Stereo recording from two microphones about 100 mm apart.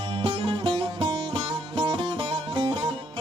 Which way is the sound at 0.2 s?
60° right (ahead or behind).